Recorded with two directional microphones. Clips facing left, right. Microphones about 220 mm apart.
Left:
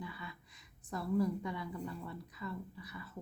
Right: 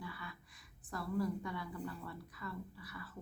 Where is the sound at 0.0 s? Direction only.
20° left (ahead or behind).